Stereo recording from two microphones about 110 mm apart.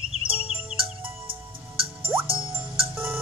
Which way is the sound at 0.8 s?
55° right (ahead or behind).